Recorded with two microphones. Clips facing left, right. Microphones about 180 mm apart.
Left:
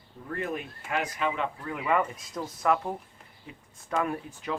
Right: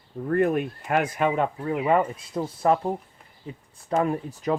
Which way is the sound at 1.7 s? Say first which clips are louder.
Right 5 dB; 35° right (ahead or behind).